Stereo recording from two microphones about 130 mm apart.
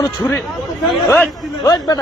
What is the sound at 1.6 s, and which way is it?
Speech, 30° left (ahead or behind).